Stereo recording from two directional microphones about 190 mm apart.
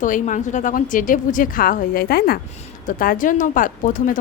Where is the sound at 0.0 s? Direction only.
40° left (ahead or behind).